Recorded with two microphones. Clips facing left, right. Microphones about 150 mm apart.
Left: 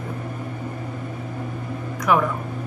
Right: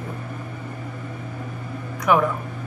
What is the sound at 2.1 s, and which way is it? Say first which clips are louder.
Speech: right 1 dB; centre (ahead or behind).